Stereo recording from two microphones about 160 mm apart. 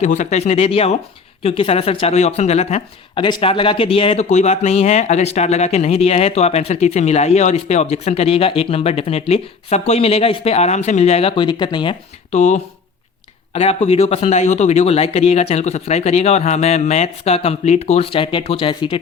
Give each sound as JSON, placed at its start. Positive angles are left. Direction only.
{"t": 0.0, "sound": "speech", "side_deg": 50}
{"t": 3.2, "sound": "speech", "side_deg": 30}
{"t": 12.3, "sound": "speech", "side_deg": 50}